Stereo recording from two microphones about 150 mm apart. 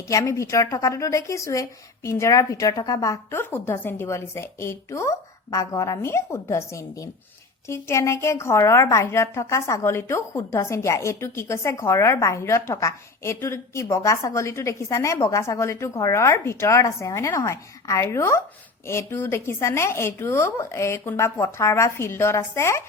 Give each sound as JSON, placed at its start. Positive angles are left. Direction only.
{"t": 0.1, "sound": "a woman's voice", "side_deg": 20}